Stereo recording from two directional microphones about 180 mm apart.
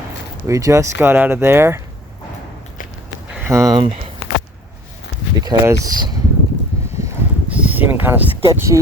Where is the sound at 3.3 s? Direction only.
15° right (ahead or behind).